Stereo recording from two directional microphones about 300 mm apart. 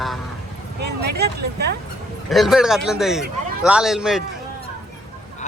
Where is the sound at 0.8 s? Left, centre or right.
Right.